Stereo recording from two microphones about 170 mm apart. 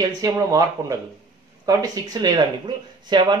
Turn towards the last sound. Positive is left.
turn(degrees=-25)  # may be behind; listen again after turning